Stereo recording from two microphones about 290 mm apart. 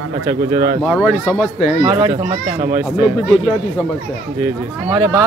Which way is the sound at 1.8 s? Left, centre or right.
Centre.